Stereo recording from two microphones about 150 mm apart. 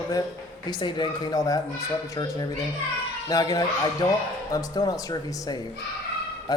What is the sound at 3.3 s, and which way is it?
A man's voice, 25° left (ahead or behind).